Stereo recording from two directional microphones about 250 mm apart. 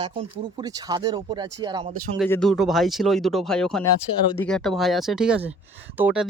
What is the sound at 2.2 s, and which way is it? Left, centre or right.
Speech, centre.